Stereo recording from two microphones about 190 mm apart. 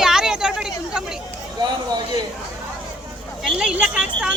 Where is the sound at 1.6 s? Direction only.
20° right (ahead or behind).